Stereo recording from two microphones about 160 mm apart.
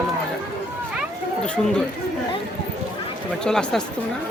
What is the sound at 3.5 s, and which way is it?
Speech, 5° left (ahead or behind).